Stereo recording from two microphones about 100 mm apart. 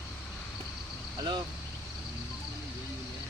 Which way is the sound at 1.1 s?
45° right (ahead or behind).